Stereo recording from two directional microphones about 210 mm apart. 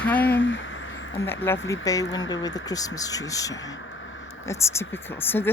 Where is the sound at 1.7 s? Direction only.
15° left (ahead or behind).